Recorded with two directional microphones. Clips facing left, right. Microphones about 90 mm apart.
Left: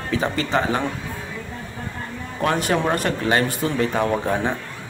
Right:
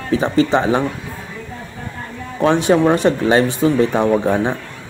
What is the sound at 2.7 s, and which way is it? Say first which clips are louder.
Speech: right 7 dB; 20° right (ahead or behind).